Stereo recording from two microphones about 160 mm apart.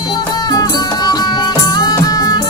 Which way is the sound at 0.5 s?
25° left (ahead or behind).